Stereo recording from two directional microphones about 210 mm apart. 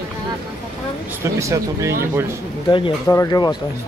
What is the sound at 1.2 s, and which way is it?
Speech, 15° right (ahead or behind).